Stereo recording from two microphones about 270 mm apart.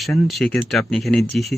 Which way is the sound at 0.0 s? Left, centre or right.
Centre.